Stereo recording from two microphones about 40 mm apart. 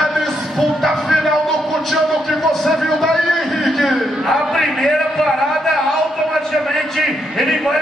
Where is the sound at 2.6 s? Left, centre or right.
Centre.